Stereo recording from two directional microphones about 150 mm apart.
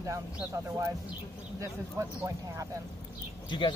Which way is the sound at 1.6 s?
20° right (ahead or behind).